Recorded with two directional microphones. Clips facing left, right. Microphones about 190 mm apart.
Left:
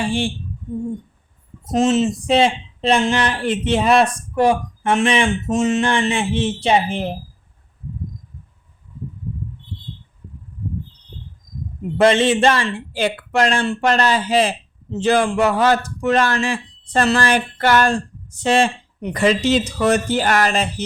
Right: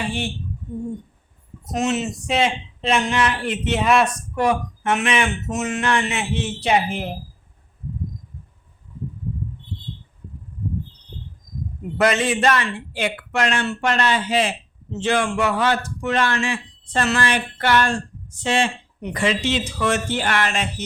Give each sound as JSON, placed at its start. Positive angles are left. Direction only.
{"t": 1.7, "sound": "speech", "side_deg": 30}
{"t": 11.9, "sound": "speech", "side_deg": 30}